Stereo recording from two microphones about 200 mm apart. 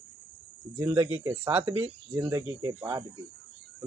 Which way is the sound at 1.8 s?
15° right (ahead or behind).